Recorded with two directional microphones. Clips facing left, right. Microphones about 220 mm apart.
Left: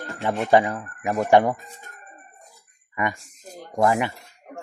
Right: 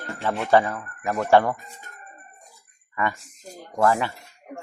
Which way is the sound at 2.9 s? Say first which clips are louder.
Even; 15° left (ahead or behind).